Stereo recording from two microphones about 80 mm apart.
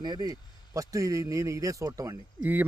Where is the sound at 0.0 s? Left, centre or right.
Right.